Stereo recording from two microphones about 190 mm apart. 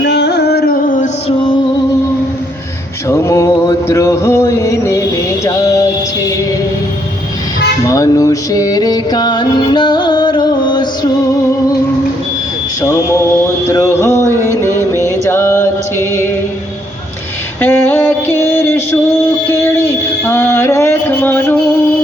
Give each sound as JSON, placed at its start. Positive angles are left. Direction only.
{"t": 0.0, "sound": "music", "side_deg": 65}
{"t": 3.1, "sound": "music", "side_deg": 15}
{"t": 7.9, "sound": "music", "side_deg": 15}
{"t": 12.8, "sound": "a sound", "side_deg": 15}
{"t": 14.5, "sound": "music", "side_deg": 15}
{"t": 17.6, "sound": "a sound", "side_deg": 10}